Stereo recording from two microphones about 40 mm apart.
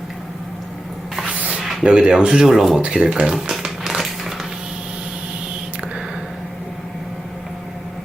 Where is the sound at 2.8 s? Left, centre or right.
Right; by 4.4 s centre.